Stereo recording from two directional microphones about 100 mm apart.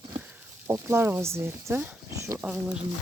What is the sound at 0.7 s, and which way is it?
Speech, 25° right (ahead or behind).